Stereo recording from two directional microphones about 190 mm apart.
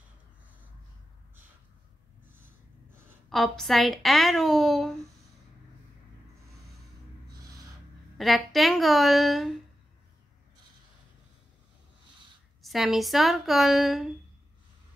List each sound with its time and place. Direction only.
3.3 s a woman's voice: centre (ahead or behind)
8.2 s a woman's voice: centre (ahead or behind)
12.6 s a woman's voice: centre (ahead or behind)